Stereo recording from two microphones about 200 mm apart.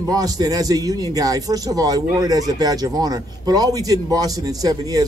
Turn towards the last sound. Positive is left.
turn(degrees=-20)  # may be behind; listen again after turning